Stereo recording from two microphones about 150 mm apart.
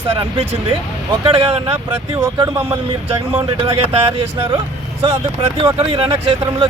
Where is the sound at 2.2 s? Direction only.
20° right (ahead or behind).